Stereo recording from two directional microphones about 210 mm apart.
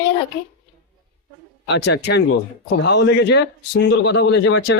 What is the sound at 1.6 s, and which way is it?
A man's voice, 55° left (ahead or behind).